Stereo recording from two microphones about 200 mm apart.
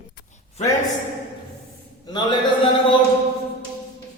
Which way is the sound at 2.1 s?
20° left (ahead or behind).